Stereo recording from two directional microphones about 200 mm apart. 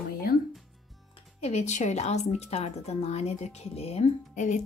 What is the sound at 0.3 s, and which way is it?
Music, 50° left (ahead or behind).